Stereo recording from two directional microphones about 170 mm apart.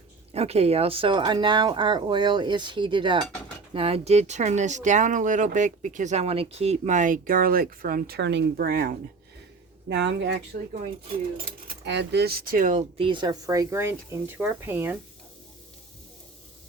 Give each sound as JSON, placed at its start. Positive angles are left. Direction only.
{"t": 0.3, "sound": "speech", "side_deg": -35}
{"t": 9.9, "sound": "speech", "side_deg": -90}
{"t": 11.3, "sound": "speech", "side_deg": -60}
{"t": 13.0, "sound": "speech", "side_deg": -30}